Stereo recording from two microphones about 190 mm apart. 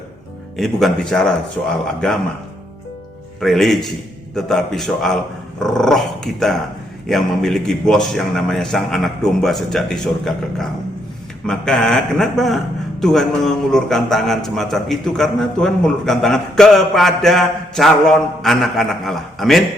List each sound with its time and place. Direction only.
0.5 s a man's voice: centre (ahead or behind)
3.4 s a man's voice: centre (ahead or behind)